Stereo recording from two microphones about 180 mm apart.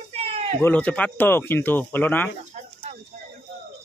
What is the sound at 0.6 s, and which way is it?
Speech, 10° left (ahead or behind).